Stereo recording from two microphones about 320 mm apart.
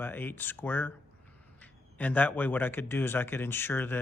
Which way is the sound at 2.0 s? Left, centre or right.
Centre.